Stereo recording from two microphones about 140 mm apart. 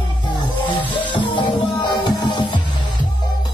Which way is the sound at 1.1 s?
35° left (ahead or behind).